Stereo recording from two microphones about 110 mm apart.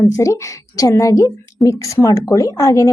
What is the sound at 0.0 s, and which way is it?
A woman's voice, 30° left (ahead or behind).